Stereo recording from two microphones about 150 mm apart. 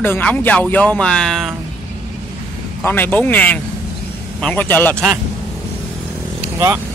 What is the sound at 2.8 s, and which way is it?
Speech, 15° left (ahead or behind).